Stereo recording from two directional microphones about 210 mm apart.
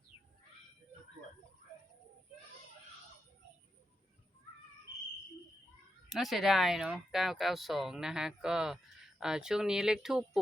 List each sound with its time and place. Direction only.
6.1 s speech: centre (ahead or behind)